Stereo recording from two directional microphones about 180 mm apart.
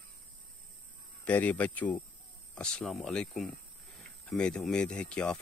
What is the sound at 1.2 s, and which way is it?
Speech, 10° left (ahead or behind).